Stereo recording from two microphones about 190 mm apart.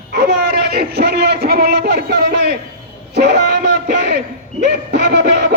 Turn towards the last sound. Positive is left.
turn(degrees=-65)  # may be behind; listen again after turning